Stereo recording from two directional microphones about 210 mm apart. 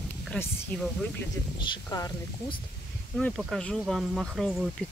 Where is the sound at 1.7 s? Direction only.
20° left (ahead or behind).